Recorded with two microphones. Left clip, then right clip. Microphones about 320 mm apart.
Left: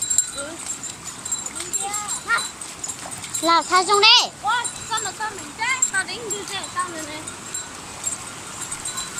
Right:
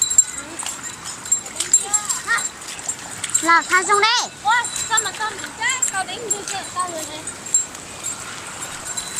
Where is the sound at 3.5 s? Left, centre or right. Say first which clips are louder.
Right 2 dB; centre.